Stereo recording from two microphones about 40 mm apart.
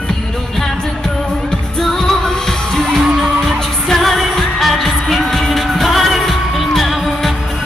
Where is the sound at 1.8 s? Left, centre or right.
Centre.